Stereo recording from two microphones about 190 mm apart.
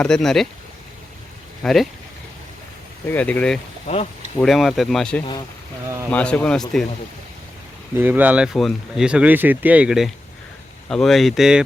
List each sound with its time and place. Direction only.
0.0 s speech: 5° left (ahead or behind)
1.6 s speech: centre (ahead or behind)
3.1 s speech: 10° left (ahead or behind)
3.8 s speech: 35° left (ahead or behind)
4.4 s speech: centre (ahead or behind)
7.9 s speech: 10° right (ahead or behind)